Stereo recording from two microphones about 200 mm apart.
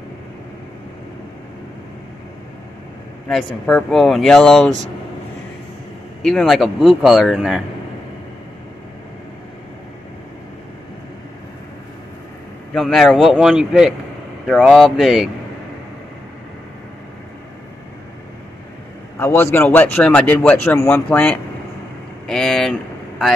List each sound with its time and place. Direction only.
3.3 s speech: centre (ahead or behind)
6.2 s speech: centre (ahead or behind)
12.7 s speech: centre (ahead or behind)
19.1 s a man's voice: 10° left (ahead or behind)